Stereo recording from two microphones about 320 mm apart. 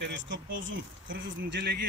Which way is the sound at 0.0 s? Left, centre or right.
Right.